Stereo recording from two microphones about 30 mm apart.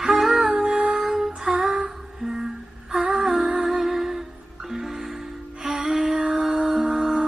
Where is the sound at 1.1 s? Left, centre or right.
Centre.